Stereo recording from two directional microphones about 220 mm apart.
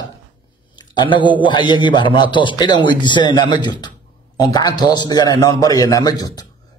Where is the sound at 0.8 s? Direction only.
20° left (ahead or behind).